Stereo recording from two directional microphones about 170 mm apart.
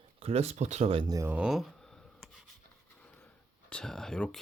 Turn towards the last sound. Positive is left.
turn(degrees=5)  # may be behind; listen again after turning